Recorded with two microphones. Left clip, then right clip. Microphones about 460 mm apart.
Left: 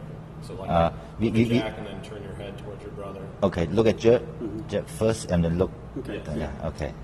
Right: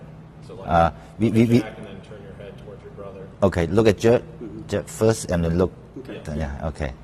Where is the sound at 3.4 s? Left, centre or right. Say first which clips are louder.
Right 4 dB; right.